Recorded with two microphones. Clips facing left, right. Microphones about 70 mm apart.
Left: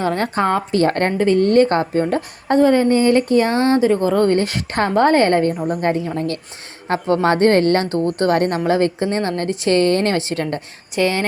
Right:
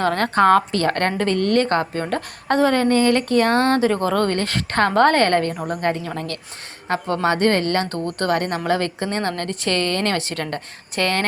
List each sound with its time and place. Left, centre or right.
0.1 s a woman's voice: centre
2.5 s a woman's voice: centre
3.5 s speech: right
3.8 s a woman's voice: centre
5.5 s a woman's voice: centre
6.1 s a woman's voice: left
10.9 s a woman's voice: centre